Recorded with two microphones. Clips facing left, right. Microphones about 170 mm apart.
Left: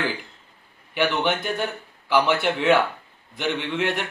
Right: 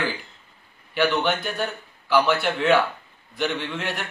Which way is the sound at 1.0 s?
20° left (ahead or behind).